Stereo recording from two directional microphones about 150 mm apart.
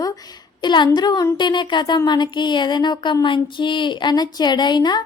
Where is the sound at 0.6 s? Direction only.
30° left (ahead or behind).